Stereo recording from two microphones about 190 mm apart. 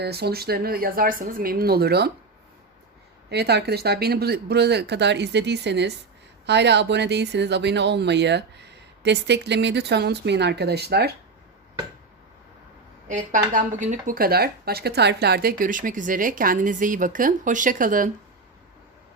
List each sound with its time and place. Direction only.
0.0 s speech: 60° right (ahead or behind)
3.2 s speech: 60° right (ahead or behind)
13.1 s speech: 40° right (ahead or behind)